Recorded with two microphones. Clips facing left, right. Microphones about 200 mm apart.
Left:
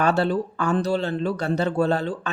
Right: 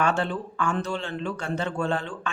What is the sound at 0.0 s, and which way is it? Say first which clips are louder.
Speech: left 5 dB; 35° left (ahead or behind).